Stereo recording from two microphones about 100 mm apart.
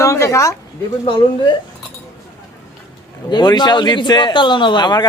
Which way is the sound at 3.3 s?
45° left (ahead or behind).